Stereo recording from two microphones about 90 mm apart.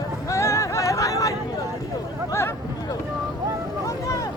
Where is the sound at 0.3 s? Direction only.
35° left (ahead or behind).